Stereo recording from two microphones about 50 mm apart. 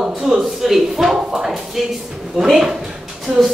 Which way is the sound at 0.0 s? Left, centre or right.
Centre.